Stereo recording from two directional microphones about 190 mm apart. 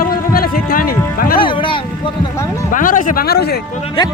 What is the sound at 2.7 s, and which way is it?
Speech, 45° left (ahead or behind).